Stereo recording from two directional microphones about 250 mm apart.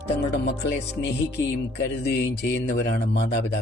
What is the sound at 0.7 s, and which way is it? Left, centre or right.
Speech, left.